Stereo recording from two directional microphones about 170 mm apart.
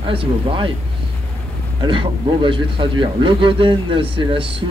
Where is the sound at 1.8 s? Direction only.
30° right (ahead or behind).